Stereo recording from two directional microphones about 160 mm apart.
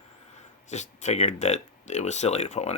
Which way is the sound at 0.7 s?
45° left (ahead or behind).